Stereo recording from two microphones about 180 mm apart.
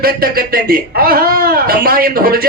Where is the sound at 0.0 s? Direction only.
55° right (ahead or behind).